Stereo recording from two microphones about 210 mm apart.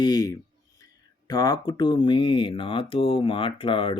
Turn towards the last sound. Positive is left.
turn(degrees=25)  # may be behind; listen again after turning